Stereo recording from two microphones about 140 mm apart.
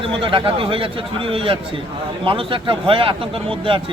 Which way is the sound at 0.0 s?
40° right (ahead or behind).